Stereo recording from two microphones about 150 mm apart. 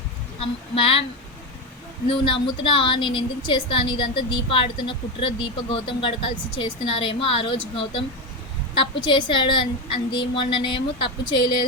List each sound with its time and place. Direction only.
0.3 s a woman's voice: 40° left (ahead or behind)
2.0 s a woman's voice: 35° left (ahead or behind)